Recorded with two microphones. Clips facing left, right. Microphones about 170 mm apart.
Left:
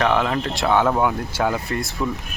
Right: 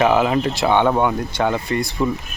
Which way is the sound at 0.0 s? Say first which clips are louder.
Right 4 dB; 10° right (ahead or behind).